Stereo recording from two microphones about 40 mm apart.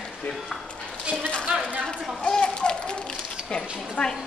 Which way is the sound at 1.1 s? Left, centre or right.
Left.